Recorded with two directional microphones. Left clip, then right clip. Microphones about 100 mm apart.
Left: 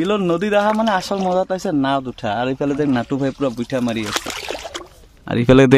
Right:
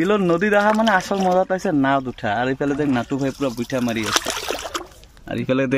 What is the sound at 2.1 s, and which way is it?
Speech, 50° left (ahead or behind).